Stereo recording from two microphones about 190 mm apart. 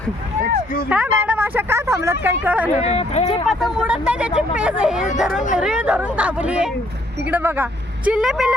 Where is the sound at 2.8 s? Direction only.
35° left (ahead or behind).